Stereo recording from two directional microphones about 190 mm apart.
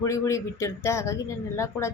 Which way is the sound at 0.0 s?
15° left (ahead or behind).